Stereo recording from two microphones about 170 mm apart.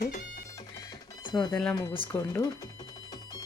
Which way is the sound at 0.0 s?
50° left (ahead or behind).